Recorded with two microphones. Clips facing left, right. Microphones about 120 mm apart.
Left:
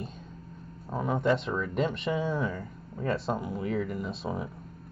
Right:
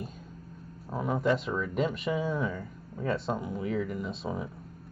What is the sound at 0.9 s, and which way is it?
Speech, centre (ahead or behind).